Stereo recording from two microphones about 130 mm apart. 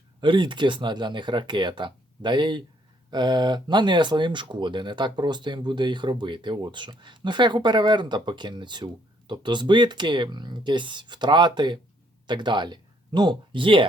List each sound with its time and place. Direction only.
0.2 s speech: 40° right (ahead or behind)